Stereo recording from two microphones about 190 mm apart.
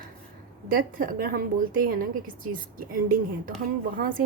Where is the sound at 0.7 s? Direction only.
45° right (ahead or behind).